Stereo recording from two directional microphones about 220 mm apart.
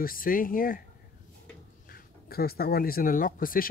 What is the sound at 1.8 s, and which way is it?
Speech, 45° left (ahead or behind).